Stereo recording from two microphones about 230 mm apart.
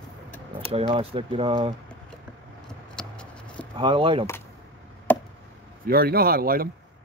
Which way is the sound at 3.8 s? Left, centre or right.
Right.